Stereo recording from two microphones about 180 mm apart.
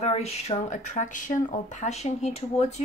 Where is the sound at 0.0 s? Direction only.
35° left (ahead or behind).